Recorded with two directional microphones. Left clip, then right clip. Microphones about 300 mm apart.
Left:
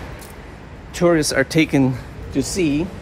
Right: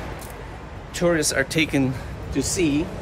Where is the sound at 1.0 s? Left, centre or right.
Centre.